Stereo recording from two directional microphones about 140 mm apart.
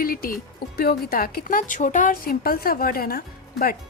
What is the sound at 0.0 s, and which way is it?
A woman's voice, 90° left.